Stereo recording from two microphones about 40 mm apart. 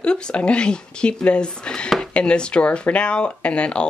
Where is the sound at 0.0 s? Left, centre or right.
Left.